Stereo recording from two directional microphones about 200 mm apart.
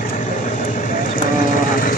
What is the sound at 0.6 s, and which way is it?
Vehicle, 40° left (ahead or behind).